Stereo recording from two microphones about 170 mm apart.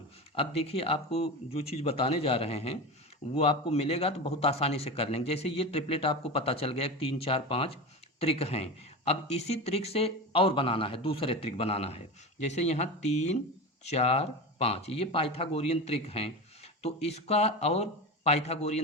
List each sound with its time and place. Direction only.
0.3 s speech: 35° left (ahead or behind)